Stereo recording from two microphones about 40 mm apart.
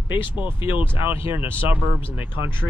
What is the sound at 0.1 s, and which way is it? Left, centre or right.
Speech, right.